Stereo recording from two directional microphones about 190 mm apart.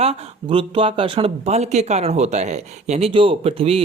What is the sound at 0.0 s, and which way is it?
Speech, 30° right (ahead or behind).